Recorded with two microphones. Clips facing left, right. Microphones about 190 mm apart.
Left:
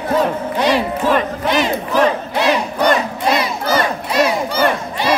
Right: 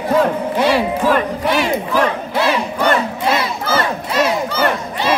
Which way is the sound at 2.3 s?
15° left (ahead or behind).